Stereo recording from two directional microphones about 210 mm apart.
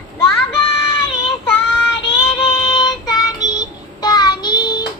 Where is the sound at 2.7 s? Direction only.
20° left (ahead or behind).